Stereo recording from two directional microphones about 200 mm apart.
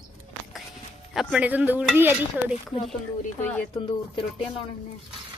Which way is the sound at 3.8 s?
25° left (ahead or behind).